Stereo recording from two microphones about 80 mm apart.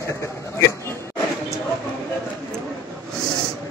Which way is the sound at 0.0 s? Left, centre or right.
Left.